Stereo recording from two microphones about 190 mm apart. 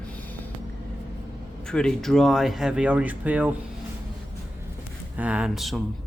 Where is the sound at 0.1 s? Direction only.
10° left (ahead or behind).